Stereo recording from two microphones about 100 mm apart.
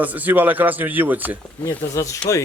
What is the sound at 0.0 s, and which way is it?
A man's voice, 15° right (ahead or behind).